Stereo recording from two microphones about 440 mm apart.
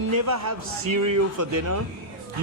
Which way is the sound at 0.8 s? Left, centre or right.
Right.